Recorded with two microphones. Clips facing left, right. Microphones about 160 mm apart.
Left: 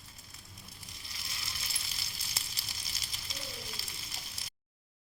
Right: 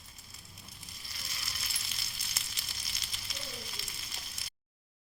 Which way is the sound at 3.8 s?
35° left (ahead or behind).